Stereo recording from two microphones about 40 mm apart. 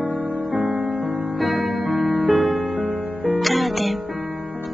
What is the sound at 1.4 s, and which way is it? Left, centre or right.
Music, centre.